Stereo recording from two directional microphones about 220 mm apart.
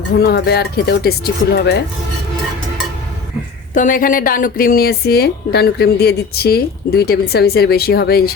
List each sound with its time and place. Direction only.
0.2 s a woman's voice: 45° left (ahead or behind)
3.8 s a woman's voice: 35° left (ahead or behind)